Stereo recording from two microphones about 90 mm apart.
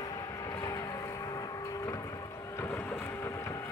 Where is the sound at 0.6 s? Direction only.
40° left (ahead or behind).